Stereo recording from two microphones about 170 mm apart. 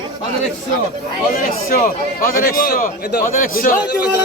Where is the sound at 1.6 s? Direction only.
55° left (ahead or behind).